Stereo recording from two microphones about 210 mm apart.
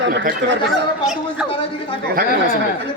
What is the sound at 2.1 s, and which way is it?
Speech, 45° right (ahead or behind).